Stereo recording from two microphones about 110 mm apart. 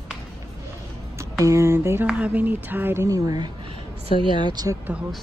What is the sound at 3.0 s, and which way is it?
Speech, 30° right (ahead or behind).